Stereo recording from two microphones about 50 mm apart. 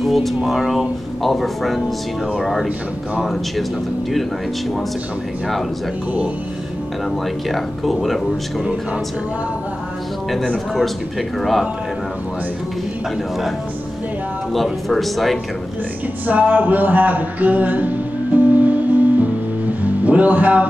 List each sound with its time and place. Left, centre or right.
0.0 s speech: centre
7.4 s speech: centre
11.3 s speech: centre
14.5 s speech: centre
16.3 s music: right